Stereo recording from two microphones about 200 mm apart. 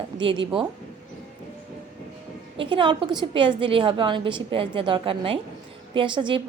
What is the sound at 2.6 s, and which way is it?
A woman's voice, 25° right (ahead or behind).